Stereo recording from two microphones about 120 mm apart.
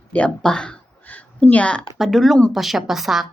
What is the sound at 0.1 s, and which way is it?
Speech, 10° left (ahead or behind).